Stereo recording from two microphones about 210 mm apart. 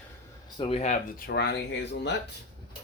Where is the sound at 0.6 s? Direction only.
30° left (ahead or behind).